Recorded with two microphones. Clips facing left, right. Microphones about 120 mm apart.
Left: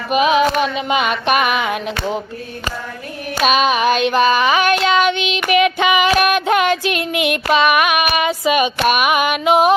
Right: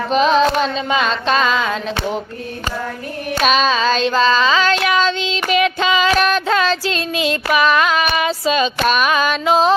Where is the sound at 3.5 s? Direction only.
15° left (ahead or behind).